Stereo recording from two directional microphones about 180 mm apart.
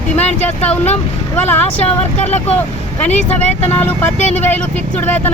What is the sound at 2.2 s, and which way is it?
Speech, 40° left (ahead or behind).